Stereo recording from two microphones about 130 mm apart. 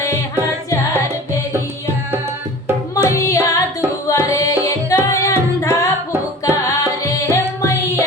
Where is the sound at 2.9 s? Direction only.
25° left (ahead or behind).